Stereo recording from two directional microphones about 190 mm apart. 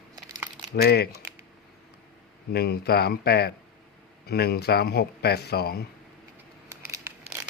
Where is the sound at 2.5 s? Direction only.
55° left (ahead or behind).